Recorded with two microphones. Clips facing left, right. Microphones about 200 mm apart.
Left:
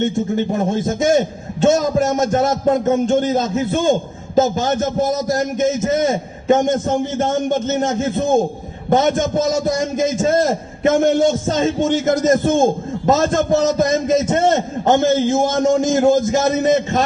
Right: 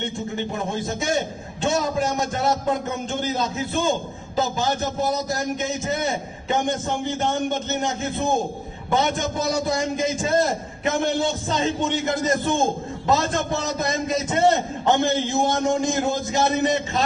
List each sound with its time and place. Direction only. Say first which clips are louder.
0.5 s a man's voice: left 8 dB; 45° left (ahead or behind)